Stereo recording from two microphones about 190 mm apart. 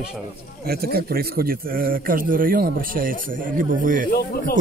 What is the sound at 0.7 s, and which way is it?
Speech, 55° right (ahead or behind).